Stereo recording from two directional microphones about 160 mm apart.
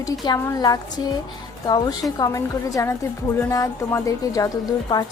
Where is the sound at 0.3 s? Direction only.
25° left (ahead or behind).